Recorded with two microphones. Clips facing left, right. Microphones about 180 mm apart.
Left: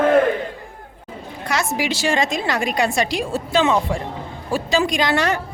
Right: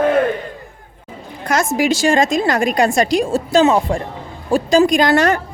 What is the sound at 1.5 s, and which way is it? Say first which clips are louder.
A woman's voice: right 6 dB; 45° right (ahead or behind).